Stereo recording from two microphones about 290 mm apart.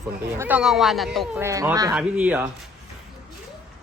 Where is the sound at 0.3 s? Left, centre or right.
Centre.